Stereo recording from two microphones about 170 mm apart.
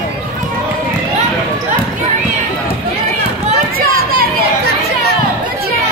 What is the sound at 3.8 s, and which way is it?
Chatter, 60° right (ahead or behind).